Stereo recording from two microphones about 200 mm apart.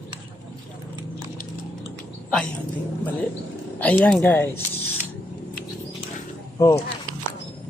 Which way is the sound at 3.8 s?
10° left (ahead or behind).